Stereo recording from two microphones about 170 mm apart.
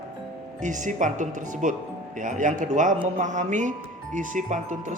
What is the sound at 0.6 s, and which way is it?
Speech, 45° right (ahead or behind).